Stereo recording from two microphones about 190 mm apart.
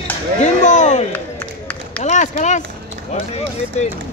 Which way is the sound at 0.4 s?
40° left (ahead or behind).